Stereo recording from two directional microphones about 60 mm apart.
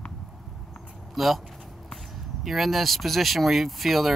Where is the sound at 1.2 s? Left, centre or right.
Centre.